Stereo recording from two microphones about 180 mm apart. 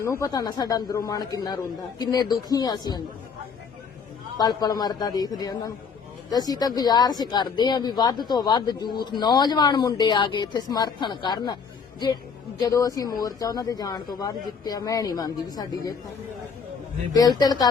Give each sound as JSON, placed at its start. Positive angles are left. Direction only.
{"t": 0.0, "sound": "speech", "side_deg": 15}
{"t": 4.4, "sound": "speech", "side_deg": 20}
{"t": 17.1, "sound": "speech", "side_deg": 20}